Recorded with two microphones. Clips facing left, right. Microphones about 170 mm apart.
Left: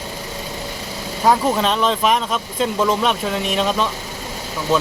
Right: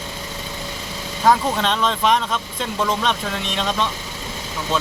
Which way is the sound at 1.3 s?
5° left (ahead or behind).